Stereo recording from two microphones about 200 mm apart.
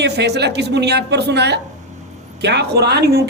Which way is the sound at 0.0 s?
55° right (ahead or behind).